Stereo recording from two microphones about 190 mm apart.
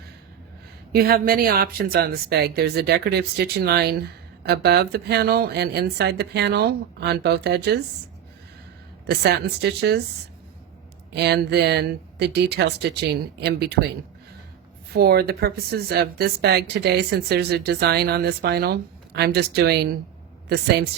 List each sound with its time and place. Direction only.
0.9 s speech: 50° right (ahead or behind)
9.0 s speech: 60° right (ahead or behind)
11.1 s speech: 60° right (ahead or behind)
14.9 s speech: 55° right (ahead or behind)